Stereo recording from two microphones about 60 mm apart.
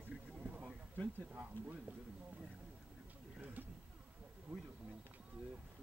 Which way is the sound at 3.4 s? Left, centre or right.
Right.